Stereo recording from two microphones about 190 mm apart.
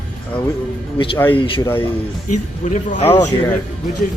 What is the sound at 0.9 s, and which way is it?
Speech, 25° left (ahead or behind).